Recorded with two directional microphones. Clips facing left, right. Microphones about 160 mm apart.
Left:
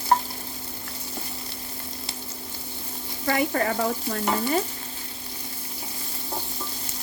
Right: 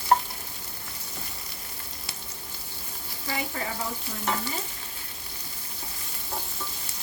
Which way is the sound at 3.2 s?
65° left (ahead or behind).